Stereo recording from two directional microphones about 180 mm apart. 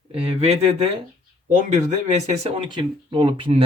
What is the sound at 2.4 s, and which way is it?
Speech, 30° right (ahead or behind).